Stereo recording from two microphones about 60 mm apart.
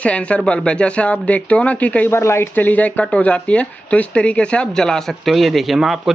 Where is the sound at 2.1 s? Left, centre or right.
Left.